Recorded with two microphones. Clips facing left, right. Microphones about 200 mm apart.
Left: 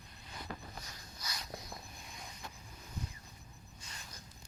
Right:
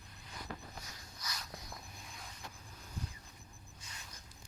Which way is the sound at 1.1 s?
25° left (ahead or behind).